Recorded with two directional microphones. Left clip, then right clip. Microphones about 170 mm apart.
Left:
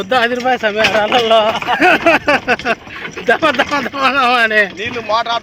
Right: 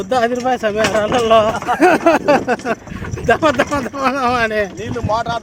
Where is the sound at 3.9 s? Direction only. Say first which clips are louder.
Left 4 dB; 15° right (ahead or behind).